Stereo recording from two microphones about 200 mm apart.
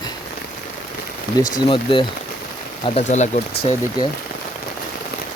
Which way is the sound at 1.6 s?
25° left (ahead or behind).